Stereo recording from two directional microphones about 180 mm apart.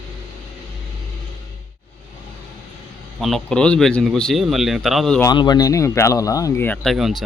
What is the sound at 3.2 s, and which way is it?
Speech, 5° left (ahead or behind).